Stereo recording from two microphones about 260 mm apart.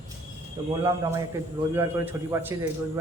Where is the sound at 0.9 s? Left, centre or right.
Centre.